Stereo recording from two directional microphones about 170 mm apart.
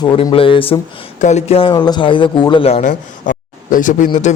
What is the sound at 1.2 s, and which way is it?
A man's voice, 45° left (ahead or behind).